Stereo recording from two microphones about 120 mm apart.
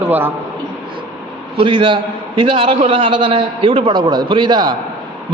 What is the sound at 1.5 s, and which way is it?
A man's voice, 45° right (ahead or behind).